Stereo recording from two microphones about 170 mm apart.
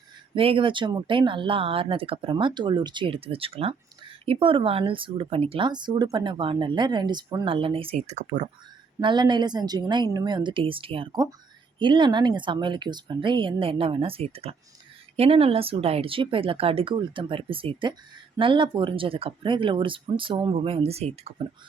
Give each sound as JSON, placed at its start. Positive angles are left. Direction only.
{"t": 0.3, "sound": "speech", "side_deg": -30}
{"t": 9.0, "sound": "speech", "side_deg": -25}